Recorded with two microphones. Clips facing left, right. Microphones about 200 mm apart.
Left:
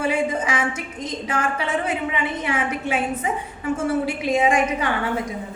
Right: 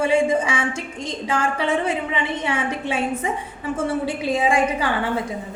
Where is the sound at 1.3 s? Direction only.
30° right (ahead or behind).